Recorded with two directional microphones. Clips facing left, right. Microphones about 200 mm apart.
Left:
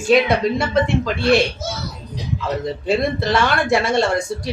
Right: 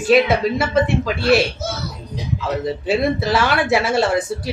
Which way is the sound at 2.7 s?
5° right (ahead or behind).